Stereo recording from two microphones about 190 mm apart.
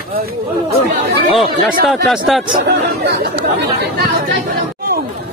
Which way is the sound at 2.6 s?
60° right (ahead or behind).